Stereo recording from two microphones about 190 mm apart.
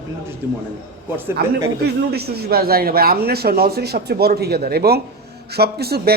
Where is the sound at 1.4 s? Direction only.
55° right (ahead or behind).